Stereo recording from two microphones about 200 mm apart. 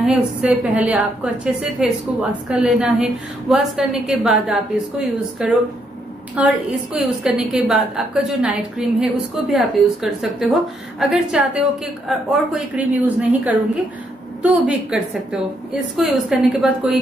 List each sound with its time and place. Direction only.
0.0 s a woman's voice: 5° right (ahead or behind)